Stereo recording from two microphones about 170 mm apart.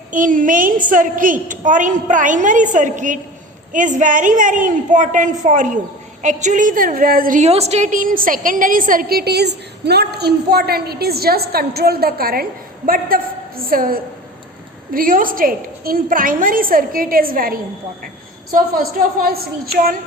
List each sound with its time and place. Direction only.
0.1 s a woman's voice: 50° right (ahead or behind)